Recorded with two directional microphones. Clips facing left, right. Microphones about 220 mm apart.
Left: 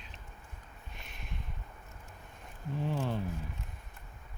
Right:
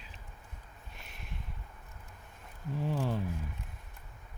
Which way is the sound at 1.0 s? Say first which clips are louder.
Left 1 dB; 5° right (ahead or behind).